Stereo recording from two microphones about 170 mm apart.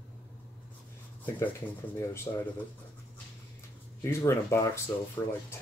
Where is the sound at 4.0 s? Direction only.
15° left (ahead or behind).